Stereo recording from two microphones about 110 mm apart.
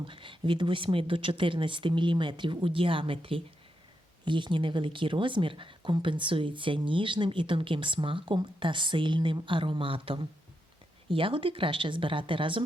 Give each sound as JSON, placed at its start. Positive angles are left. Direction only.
{"t": 0.0, "sound": "a woman's voice", "side_deg": -50}